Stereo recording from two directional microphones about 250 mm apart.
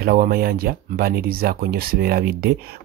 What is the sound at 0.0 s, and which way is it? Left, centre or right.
Speech, right.